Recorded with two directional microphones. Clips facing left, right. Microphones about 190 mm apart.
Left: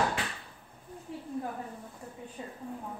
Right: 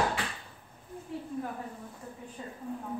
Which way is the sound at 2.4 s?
20° left (ahead or behind).